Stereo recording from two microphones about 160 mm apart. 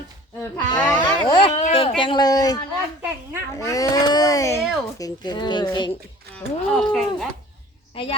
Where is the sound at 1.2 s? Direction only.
30° left (ahead or behind).